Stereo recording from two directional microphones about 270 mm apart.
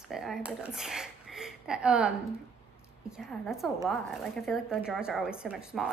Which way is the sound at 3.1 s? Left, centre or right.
Centre.